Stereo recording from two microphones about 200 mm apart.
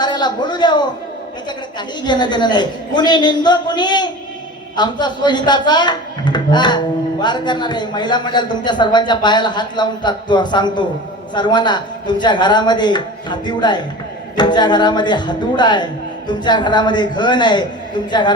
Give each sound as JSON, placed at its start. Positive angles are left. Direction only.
{"t": 0.0, "sound": "a man's voice", "side_deg": 20}
{"t": 2.0, "sound": "speech", "side_deg": 20}